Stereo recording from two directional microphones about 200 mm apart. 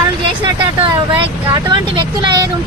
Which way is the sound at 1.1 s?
25° right (ahead or behind).